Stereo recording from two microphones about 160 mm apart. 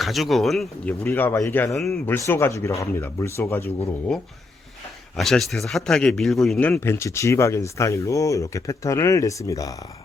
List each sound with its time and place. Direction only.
0.0 s speech: centre (ahead or behind)
1.0 s a man's voice: 15° left (ahead or behind)
1.7 s speech: centre (ahead or behind)
2.0 s a man's voice: 15° left (ahead or behind)
5.1 s a man's voice: centre (ahead or behind); by 9.7 s 20° left (ahead or behind)